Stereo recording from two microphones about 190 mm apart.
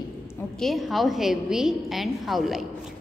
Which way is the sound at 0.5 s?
Centre (ahead or behind).